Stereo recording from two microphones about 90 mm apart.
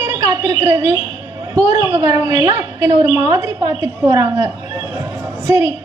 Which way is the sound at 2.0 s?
35° right (ahead or behind).